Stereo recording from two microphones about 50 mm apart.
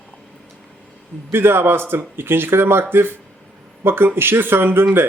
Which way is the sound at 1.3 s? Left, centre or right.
Right.